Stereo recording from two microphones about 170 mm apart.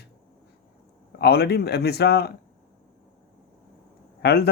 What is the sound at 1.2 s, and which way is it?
Speech, 70° left (ahead or behind).